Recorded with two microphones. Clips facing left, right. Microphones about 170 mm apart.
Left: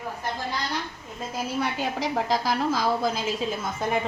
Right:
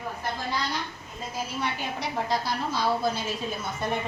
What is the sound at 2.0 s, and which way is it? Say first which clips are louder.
A woman's voice: left 3 dB; 90° left.